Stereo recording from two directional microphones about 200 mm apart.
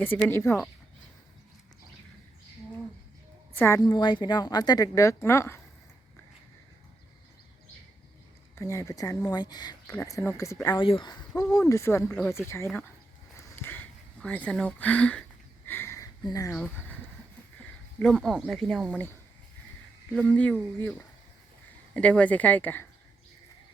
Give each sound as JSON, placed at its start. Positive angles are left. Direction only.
{"t": 0.0, "sound": "speech", "side_deg": 10}
{"t": 3.5, "sound": "a woman's voice", "side_deg": 10}
{"t": 3.8, "sound": "speech", "side_deg": 25}
{"t": 8.5, "sound": "speech", "side_deg": 15}
{"t": 11.4, "sound": "speech", "side_deg": 5}
{"t": 13.6, "sound": "a sound", "side_deg": 10}
{"t": 18.0, "sound": "speech", "side_deg": 0}
{"t": 20.1, "sound": "speech", "side_deg": 5}
{"t": 21.9, "sound": "speech", "side_deg": 5}